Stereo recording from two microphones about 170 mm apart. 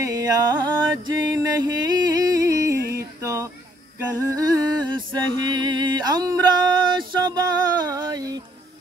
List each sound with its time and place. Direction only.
0.0 s music: 20° right (ahead or behind)
2.9 s a sound: 15° right (ahead or behind)
4.3 s music: 20° right (ahead or behind)